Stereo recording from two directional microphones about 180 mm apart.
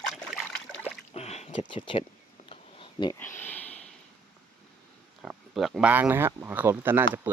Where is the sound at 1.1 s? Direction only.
35° left (ahead or behind).